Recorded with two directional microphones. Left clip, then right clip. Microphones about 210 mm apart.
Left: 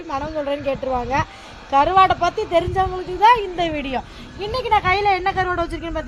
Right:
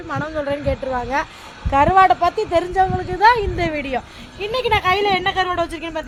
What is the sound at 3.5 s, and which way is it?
Speech, 30° right (ahead or behind).